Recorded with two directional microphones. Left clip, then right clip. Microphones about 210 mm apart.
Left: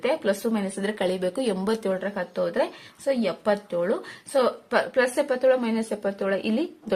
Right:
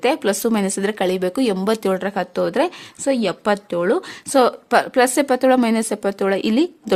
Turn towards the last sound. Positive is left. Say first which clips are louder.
# right 8 dB
turn(degrees=-40)  # may be behind; listen again after turning